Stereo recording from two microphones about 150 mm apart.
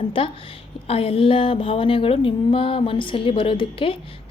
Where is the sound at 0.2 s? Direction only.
35° left (ahead or behind).